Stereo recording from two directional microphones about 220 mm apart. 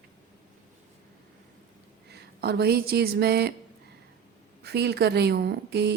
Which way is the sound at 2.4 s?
45° right (ahead or behind).